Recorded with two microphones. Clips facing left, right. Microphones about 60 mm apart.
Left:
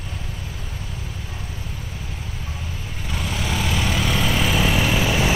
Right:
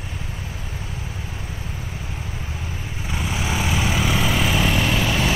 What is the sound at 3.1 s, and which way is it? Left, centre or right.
Vehicle, centre.